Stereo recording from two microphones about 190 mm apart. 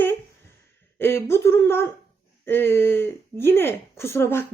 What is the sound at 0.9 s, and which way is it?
A woman's voice, 15° left (ahead or behind).